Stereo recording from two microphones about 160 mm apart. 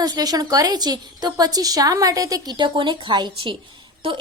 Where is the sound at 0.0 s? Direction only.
25° right (ahead or behind).